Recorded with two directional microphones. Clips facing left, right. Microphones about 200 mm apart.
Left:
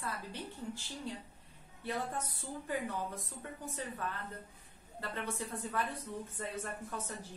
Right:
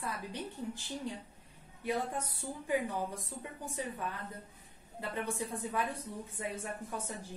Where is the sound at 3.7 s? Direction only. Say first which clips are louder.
Right 3 dB; 15° right (ahead or behind).